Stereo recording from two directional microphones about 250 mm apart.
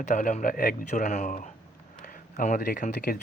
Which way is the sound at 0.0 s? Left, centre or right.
Left.